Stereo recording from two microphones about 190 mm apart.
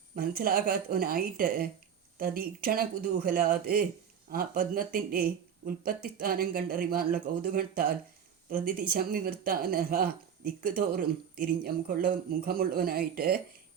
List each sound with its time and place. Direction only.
0.2 s speech: 50° right (ahead or behind)